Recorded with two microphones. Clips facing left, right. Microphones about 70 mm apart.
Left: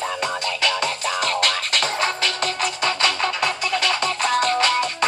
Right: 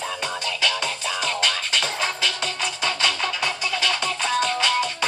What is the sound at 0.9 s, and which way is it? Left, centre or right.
Music, left.